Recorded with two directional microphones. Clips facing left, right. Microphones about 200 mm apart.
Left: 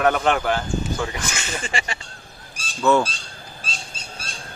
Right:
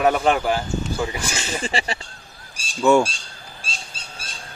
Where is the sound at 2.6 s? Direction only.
15° right (ahead or behind).